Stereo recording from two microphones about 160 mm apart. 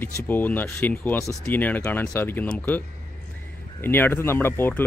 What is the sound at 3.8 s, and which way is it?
Speech, 15° left (ahead or behind).